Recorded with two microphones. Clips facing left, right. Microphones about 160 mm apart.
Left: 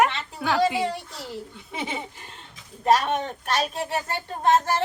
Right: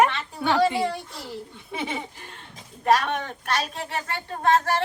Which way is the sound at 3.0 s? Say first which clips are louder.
Left 2 dB; 25° left (ahead or behind).